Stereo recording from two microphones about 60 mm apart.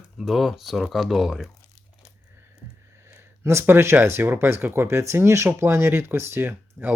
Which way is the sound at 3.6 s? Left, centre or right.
Right.